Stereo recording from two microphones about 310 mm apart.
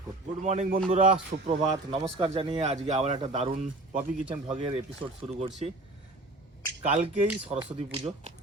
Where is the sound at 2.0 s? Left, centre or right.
Centre.